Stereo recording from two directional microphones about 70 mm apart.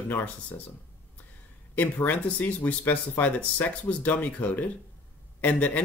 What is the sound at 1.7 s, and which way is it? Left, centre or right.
Speech, left.